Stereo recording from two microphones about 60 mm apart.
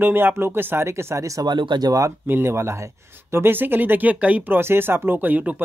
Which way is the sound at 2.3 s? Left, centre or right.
Right.